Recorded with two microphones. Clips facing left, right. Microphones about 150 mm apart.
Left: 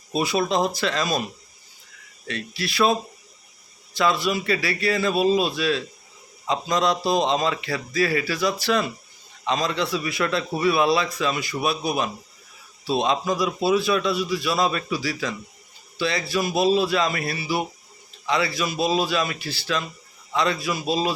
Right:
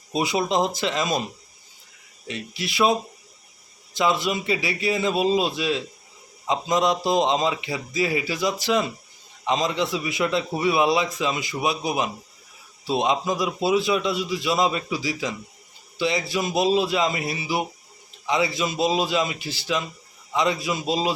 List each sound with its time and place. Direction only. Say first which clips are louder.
0.1 s a man's voice: even; 20° right (ahead or behind)
2.2 s a man's voice: left 1 dB; 20° right (ahead or behind)